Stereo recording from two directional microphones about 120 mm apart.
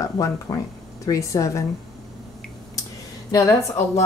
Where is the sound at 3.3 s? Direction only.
25° left (ahead or behind).